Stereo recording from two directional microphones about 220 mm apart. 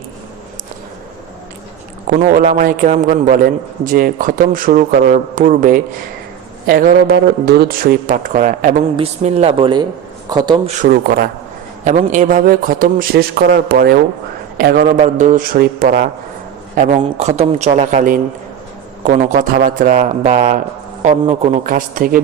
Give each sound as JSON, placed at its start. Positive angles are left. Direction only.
{"t": 2.0, "sound": "a man's voice", "side_deg": -40}
{"t": 10.8, "sound": "a man's voice", "side_deg": -40}